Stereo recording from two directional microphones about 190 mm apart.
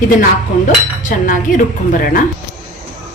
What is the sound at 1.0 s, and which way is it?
Cutlery, 45° left (ahead or behind).